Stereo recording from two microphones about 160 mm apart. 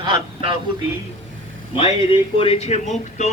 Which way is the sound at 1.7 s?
35° left (ahead or behind).